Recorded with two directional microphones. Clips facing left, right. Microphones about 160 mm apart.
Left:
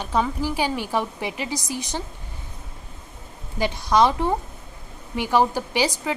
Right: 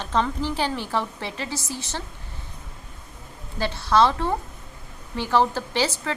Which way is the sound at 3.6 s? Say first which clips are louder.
Left 1 dB; 15° left (ahead or behind).